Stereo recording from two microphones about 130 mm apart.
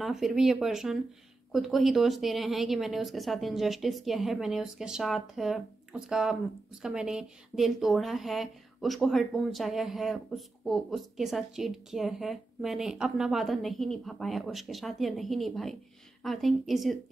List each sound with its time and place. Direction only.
0.0 s a woman's voice: centre (ahead or behind)